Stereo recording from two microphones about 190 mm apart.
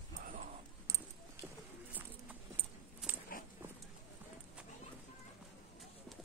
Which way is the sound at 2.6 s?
10° right (ahead or behind).